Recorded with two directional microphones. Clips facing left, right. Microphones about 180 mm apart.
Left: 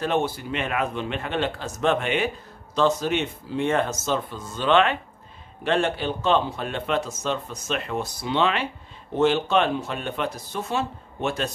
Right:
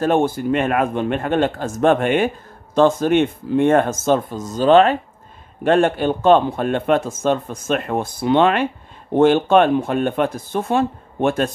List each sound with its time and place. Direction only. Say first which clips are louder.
0.0 s a man's voice: right 7 dB; 50° right (ahead or behind)
5.6 s a man's voice: right 8 dB; 50° right (ahead or behind)